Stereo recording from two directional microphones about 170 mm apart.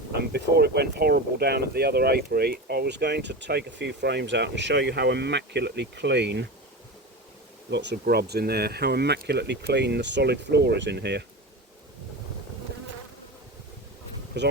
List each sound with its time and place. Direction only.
0.2 s speech: 70° right (ahead or behind); by 6.5 s 90° right
7.7 s speech: 90° right
14.3 s speech: 85° right